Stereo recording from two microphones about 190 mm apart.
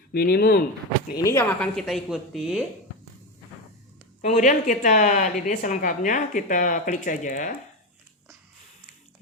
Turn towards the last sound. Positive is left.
turn(degrees=40)  # may be behind; listen again after turning